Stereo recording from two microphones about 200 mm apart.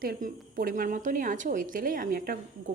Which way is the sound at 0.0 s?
45° right (ahead or behind).